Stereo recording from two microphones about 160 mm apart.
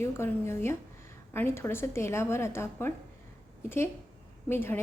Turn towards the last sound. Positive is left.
turn(degrees=15)  # may be behind; listen again after turning